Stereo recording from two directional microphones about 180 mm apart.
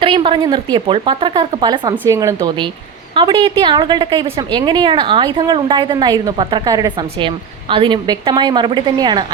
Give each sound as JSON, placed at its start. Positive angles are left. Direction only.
{"t": 0.0, "sound": "a woman's voice", "side_deg": -30}
{"t": 3.2, "sound": "a woman's voice", "side_deg": -25}